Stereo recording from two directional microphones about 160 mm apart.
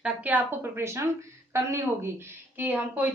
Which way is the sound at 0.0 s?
10° right (ahead or behind).